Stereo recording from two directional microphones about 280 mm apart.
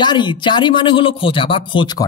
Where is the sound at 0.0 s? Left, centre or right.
Centre.